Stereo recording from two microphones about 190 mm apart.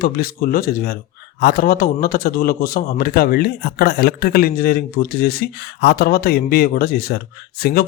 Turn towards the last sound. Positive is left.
turn(degrees=55)  # may be behind; listen again after turning